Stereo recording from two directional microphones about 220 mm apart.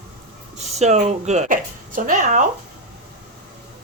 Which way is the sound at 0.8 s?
30° right (ahead or behind).